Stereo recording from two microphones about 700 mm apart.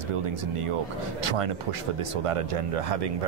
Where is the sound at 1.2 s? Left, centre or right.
Right.